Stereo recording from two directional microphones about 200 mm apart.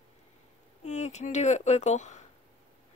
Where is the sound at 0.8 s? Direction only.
35° left (ahead or behind).